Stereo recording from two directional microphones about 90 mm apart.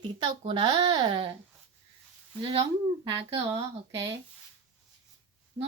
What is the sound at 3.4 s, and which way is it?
Speech, 40° right (ahead or behind).